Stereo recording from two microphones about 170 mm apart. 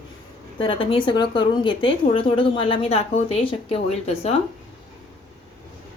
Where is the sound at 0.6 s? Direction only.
30° left (ahead or behind).